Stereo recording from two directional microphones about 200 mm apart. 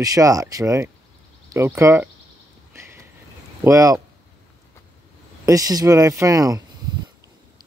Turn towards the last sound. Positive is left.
turn(degrees=-15)  # may be behind; listen again after turning